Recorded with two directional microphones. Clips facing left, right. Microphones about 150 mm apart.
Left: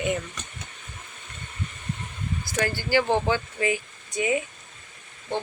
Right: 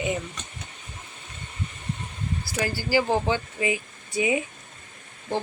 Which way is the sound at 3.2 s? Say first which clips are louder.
Left 1 dB; 20° right (ahead or behind).